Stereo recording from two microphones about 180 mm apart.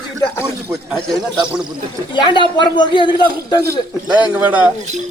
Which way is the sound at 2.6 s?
25° left (ahead or behind).